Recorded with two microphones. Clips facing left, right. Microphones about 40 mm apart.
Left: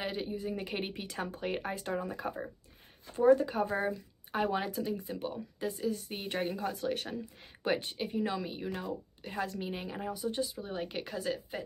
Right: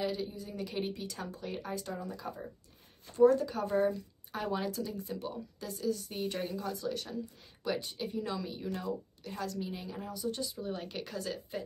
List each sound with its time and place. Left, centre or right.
0.0 s speech: left
3.2 s speech: left